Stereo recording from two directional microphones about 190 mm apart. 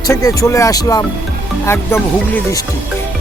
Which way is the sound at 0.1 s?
15° left (ahead or behind).